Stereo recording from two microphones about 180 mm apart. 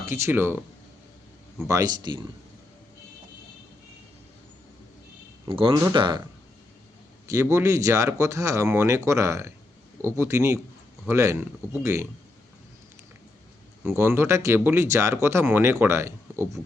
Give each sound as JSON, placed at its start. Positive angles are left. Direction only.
{"t": 0.0, "sound": "speech", "side_deg": -15}
{"t": 5.5, "sound": "speech", "side_deg": -30}
{"t": 7.3, "sound": "speech", "side_deg": -15}
{"t": 13.8, "sound": "speech", "side_deg": -15}